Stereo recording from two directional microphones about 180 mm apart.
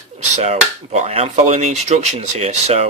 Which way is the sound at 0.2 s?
40° right (ahead or behind).